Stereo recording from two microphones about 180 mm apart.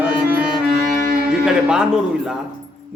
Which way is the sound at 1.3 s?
5° right (ahead or behind).